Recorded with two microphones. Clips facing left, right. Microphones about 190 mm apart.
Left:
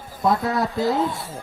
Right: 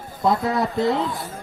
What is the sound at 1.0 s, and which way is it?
Speech, 25° left (ahead or behind).